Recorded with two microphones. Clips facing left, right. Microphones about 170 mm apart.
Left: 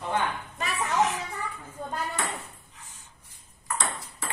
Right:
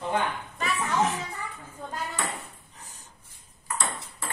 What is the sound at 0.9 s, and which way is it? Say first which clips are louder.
Children playing: left 1 dB; 35° right (ahead or behind).